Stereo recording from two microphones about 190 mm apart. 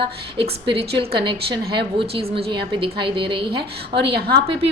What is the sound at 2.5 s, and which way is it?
A woman's voice, 25° right (ahead or behind).